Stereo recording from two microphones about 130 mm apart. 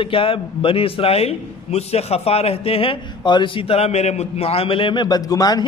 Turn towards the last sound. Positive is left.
turn(degrees=30)  # may be behind; listen again after turning